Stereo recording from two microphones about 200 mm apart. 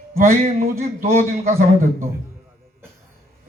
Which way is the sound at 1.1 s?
45° right (ahead or behind).